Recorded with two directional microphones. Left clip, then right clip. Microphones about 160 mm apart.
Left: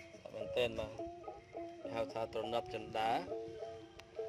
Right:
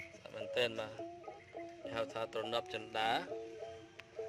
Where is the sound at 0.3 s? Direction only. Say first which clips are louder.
Even; 5° right (ahead or behind).